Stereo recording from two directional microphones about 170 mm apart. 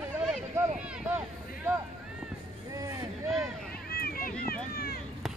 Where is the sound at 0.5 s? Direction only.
10° right (ahead or behind).